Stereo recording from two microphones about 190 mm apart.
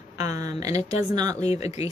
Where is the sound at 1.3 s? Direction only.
35° left (ahead or behind).